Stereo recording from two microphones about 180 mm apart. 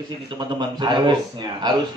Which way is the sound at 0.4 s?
25° right (ahead or behind).